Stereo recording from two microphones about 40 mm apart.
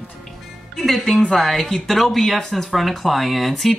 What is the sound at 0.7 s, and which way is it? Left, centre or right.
Speech, centre.